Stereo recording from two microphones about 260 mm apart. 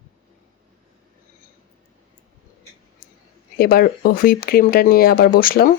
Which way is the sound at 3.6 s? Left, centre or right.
Left.